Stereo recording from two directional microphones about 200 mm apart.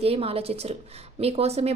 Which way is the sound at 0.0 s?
30° right (ahead or behind).